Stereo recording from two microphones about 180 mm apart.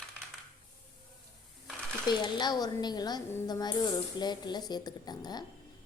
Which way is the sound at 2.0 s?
25° left (ahead or behind).